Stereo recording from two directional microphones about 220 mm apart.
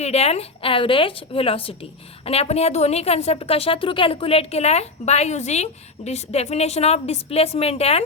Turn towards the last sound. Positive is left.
turn(degrees=25)  # may be behind; listen again after turning